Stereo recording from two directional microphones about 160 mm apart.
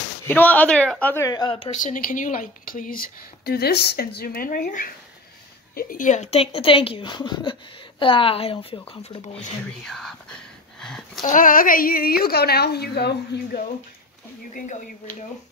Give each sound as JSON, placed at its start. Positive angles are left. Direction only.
{"t": 0.3, "sound": "speech", "side_deg": 10}
{"t": 1.3, "sound": "a woman's voice", "side_deg": 30}
{"t": 1.8, "sound": "a woman's voice", "side_deg": 60}
{"t": 9.8, "sound": "speech", "side_deg": 0}
{"t": 10.8, "sound": "a sound", "side_deg": 0}
{"t": 11.2, "sound": "a woman's voice", "side_deg": 55}